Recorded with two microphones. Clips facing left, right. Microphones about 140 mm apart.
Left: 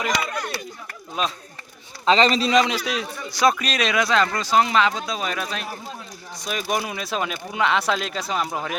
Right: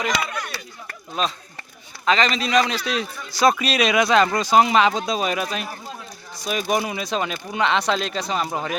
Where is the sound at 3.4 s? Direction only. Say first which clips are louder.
Right 2 dB; 5° right (ahead or behind).